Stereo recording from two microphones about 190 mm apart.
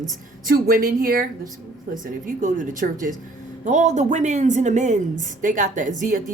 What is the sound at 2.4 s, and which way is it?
A woman's voice, 45° right (ahead or behind).